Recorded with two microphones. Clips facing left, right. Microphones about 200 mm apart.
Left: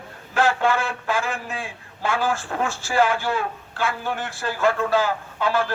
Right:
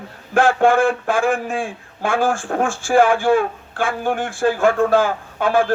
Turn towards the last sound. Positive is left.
turn(degrees=-50)  # may be behind; listen again after turning